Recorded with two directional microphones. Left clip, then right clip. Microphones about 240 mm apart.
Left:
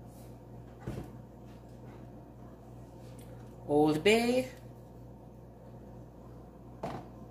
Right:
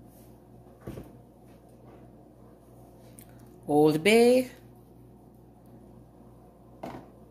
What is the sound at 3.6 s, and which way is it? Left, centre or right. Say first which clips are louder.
Speech: right 4 dB; right.